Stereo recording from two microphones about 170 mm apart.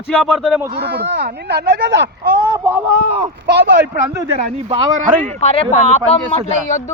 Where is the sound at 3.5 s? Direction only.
80° right.